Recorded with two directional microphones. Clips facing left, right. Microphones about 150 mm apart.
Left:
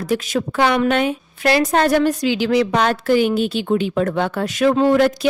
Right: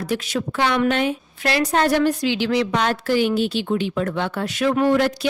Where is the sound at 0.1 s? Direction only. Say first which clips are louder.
Left 5 dB; 50° left (ahead or behind).